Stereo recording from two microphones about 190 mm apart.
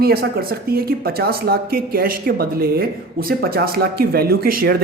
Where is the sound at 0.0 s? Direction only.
55° right (ahead or behind).